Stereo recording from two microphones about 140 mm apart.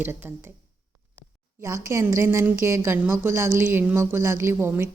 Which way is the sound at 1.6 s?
20° right (ahead or behind).